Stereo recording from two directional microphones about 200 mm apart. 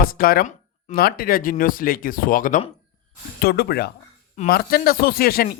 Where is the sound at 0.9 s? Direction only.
50° left (ahead or behind).